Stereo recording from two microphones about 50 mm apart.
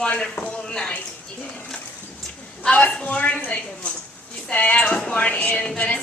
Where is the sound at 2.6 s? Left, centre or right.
Left.